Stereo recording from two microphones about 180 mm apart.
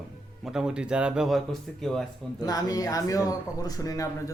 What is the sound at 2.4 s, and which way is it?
Speech, 20° left (ahead or behind).